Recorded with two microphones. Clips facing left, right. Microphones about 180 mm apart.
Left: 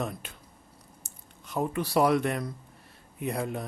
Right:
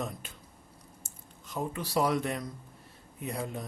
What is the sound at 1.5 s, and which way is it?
Speech, 60° left (ahead or behind).